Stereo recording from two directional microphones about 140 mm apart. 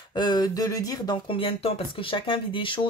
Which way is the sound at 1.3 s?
40° left (ahead or behind).